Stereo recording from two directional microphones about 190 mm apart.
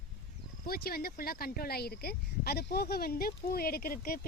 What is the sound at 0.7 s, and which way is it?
Speech, 50° left (ahead or behind).